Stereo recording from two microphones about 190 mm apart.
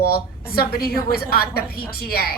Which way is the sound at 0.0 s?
55° left (ahead or behind).